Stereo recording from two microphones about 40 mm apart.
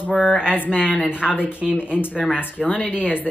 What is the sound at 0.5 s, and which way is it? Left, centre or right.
A woman's voice, left.